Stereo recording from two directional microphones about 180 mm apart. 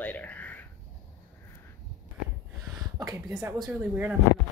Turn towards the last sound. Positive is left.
turn(degrees=-5)  # may be behind; listen again after turning